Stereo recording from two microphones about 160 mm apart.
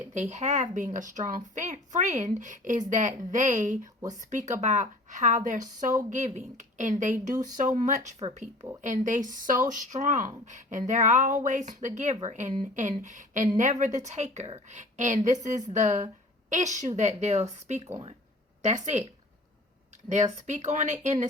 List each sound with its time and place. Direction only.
0.1 s speech: 45° right (ahead or behind)
20.3 s speech: 50° right (ahead or behind)